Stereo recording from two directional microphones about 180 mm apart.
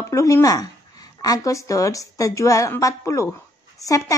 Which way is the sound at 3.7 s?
20° left (ahead or behind).